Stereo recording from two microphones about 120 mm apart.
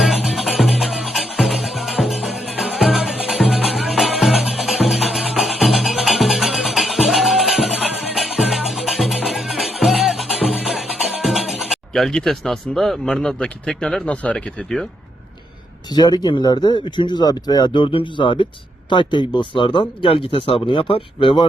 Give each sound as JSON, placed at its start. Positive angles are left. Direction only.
{"t": 0.0, "sound": "music", "side_deg": 0}
{"t": 15.9, "sound": "speech", "side_deg": 35}